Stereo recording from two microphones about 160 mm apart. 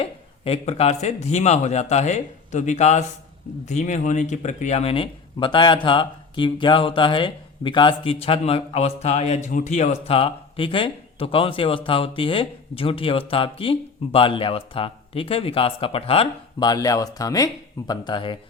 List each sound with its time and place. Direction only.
0.0 s a man's voice: 40° left (ahead or behind)
16.6 s speech: 25° left (ahead or behind)